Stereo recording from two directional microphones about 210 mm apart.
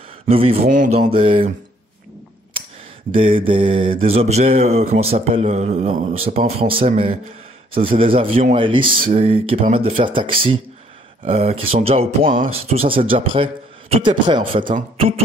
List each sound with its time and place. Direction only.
0.3 s mantra: 25° right (ahead or behind)
3.2 s mantra: 25° right (ahead or behind)
14.7 s speech: 30° right (ahead or behind)